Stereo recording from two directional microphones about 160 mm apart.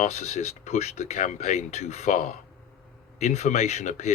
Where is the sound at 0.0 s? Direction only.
45° left (ahead or behind).